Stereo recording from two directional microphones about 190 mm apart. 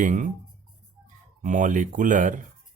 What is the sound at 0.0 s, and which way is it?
Speech, 45° right (ahead or behind).